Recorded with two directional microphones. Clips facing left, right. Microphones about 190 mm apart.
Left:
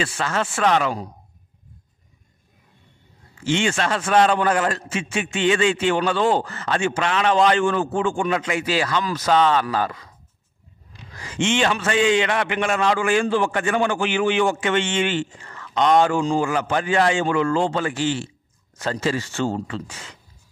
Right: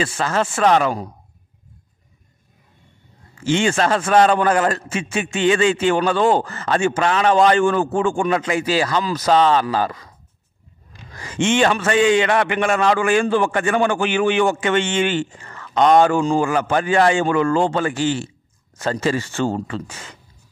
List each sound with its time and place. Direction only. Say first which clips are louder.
0.0 s a man's voice: right 3 dB; 40° right (ahead or behind)
3.4 s a man's voice: right 4 dB; 40° right (ahead or behind)
10.9 s a man's voice: right 2 dB; 50° right (ahead or behind)